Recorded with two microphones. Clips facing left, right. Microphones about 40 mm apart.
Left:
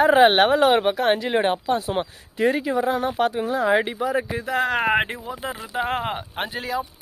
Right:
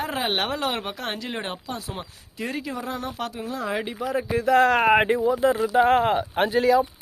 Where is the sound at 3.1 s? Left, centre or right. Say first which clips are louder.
Left 8 dB; left.